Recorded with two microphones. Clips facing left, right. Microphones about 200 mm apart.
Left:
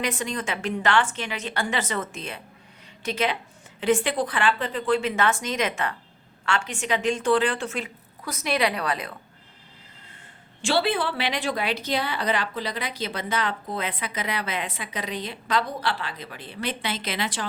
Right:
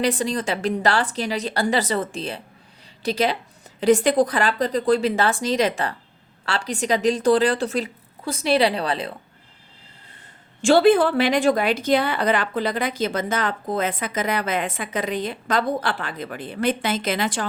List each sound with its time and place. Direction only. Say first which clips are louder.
0.0 s a woman's voice: right 6 dB; 35° right (ahead or behind)
10.6 s a woman's voice: right 9 dB; 45° right (ahead or behind)